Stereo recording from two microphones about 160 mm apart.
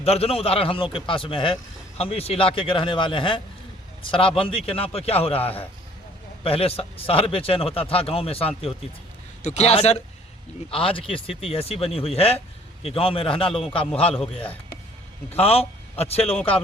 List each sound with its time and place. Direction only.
0.0 s a man's voice: 40° left (ahead or behind)
5.4 s a man's voice: 10° left (ahead or behind)
6.4 s a man's voice: 35° left (ahead or behind)
15.3 s a man's voice: 40° left (ahead or behind)